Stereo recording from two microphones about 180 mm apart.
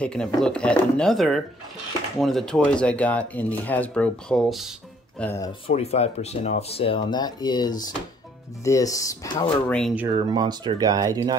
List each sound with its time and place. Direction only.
0.0 s speech: 5° left (ahead or behind)
5.2 s speech: 15° left (ahead or behind)
5.7 s speech: 35° left (ahead or behind)
9.7 s speech: 5° left (ahead or behind)
10.0 s speech: 20° right (ahead or behind)